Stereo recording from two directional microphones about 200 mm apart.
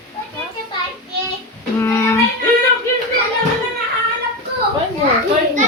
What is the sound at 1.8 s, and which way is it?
Child singing, 15° left (ahead or behind).